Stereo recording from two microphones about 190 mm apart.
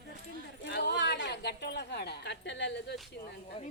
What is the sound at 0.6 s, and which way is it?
A woman's voice, 65° left (ahead or behind).